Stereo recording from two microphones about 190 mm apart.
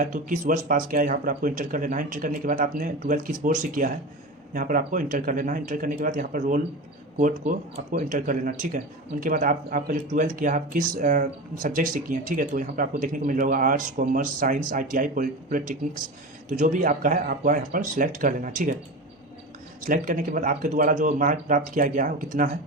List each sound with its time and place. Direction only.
0.0 s speech: 45° right (ahead or behind)
19.8 s speech: 45° right (ahead or behind)